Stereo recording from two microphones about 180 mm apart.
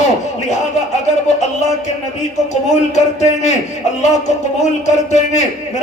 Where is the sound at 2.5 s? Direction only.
40° left (ahead or behind).